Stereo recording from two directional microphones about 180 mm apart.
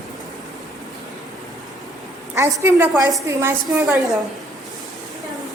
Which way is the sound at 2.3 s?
15° right (ahead or behind).